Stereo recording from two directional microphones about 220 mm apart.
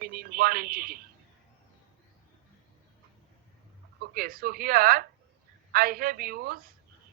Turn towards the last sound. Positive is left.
turn(degrees=-40)  # may be behind; listen again after turning